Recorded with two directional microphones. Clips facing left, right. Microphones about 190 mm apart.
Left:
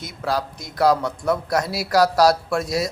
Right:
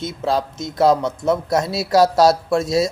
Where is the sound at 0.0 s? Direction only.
25° right (ahead or behind).